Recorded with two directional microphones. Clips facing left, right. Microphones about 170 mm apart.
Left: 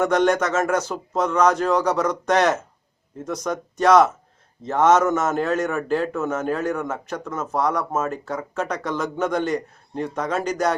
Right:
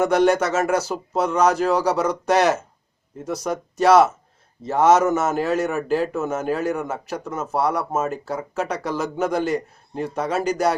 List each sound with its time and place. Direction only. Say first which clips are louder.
0.0 s a man's voice: right 1 dB; 5° right (ahead or behind)